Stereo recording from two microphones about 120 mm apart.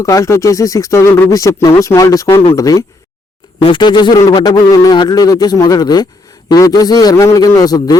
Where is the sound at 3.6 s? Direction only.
45° left (ahead or behind).